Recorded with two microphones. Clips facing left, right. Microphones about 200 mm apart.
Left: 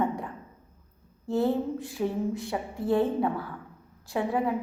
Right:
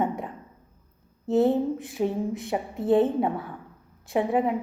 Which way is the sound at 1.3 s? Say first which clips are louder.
Right 4 dB; 20° right (ahead or behind).